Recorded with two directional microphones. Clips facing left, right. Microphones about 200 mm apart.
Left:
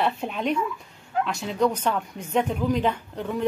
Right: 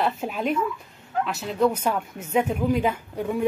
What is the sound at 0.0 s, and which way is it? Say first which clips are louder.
Speech: even; 5° right (ahead or behind).